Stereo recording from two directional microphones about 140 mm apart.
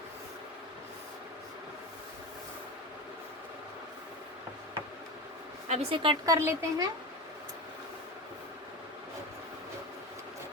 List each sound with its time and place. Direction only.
5.6 s speech: 45° right (ahead or behind)
6.2 s speech: 20° right (ahead or behind)